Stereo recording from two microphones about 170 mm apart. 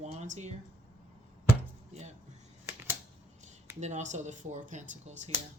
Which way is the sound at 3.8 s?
45° right (ahead or behind).